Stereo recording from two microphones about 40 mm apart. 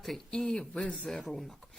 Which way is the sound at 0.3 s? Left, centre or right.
Centre.